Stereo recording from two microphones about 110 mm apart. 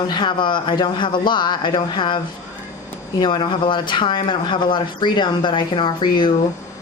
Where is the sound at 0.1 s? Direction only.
45° left (ahead or behind).